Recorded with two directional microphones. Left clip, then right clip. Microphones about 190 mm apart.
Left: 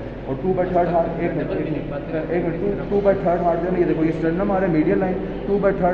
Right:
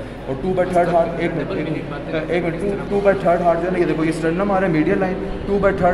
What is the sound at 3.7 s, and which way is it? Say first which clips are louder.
A man's voice: right 1 dB; 55° right (ahead or behind).